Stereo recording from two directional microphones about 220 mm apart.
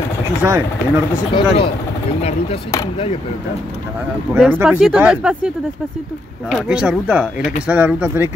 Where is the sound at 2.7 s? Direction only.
20° left (ahead or behind).